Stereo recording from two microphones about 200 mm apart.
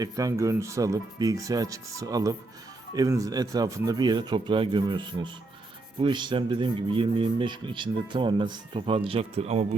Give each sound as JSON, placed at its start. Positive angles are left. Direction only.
{"t": 0.0, "sound": "speech", "side_deg": -15}